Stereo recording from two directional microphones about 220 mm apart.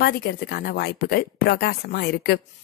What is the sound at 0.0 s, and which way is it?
A woman's voice, 45° left (ahead or behind).